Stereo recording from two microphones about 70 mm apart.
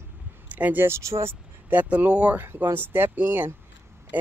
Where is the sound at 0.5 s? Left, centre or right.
Right.